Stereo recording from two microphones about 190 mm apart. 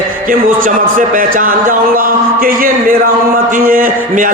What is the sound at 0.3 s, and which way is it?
A man's voice, 45° right (ahead or behind).